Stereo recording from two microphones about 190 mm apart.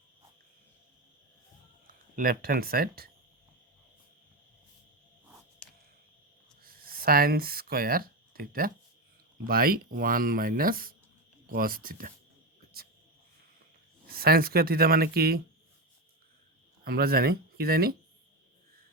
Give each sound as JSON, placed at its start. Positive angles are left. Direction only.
{"t": 1.9, "sound": "speech", "side_deg": -50}
{"t": 5.6, "sound": "a sound", "side_deg": 5}
{"t": 6.6, "sound": "speech", "side_deg": -50}
{"t": 14.1, "sound": "speech", "side_deg": -50}
{"t": 16.8, "sound": "speech", "side_deg": -55}